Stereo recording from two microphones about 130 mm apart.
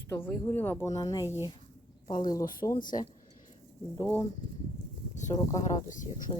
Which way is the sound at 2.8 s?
90° left.